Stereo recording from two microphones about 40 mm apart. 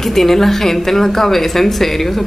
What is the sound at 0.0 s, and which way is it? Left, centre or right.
A woman's voice, centre.